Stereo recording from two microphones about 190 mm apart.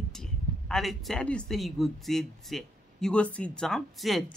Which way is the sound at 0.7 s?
Centre (ahead or behind).